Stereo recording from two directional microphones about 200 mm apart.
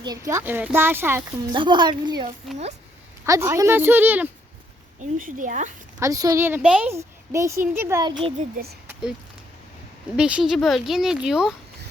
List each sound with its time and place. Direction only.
0.0 s a woman's voice: 20° right (ahead or behind)
1.5 s a woman's voice: 25° right (ahead or behind)
4.9 s speech: 40° right (ahead or behind)
6.0 s a woman's voice: 15° right (ahead or behind)
8.2 s speech: 35° right (ahead or behind)
8.9 s a sound: 5° right (ahead or behind)
10.2 s speech: 5° right (ahead or behind)